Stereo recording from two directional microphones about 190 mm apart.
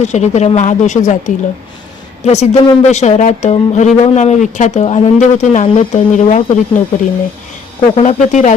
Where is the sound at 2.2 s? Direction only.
35° left (ahead or behind).